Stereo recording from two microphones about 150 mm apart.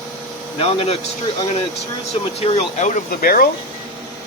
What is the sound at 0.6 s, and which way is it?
Speech, 40° left (ahead or behind).